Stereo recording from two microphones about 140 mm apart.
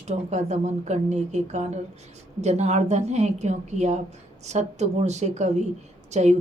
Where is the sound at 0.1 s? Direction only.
55° right (ahead or behind).